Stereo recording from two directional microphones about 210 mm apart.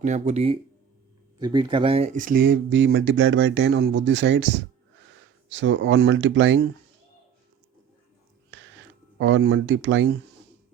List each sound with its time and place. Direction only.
0.0 s speech: 35° right (ahead or behind); by 6.7 s 60° right (ahead or behind)
9.1 s speech: 60° right (ahead or behind)